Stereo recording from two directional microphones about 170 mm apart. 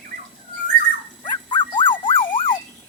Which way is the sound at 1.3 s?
25° left (ahead or behind).